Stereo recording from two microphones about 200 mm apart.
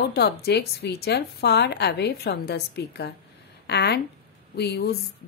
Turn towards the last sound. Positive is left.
turn(degrees=55)  # may be behind; listen again after turning